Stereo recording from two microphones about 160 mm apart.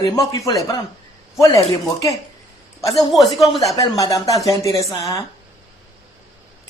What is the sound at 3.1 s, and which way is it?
Speech, centre (ahead or behind).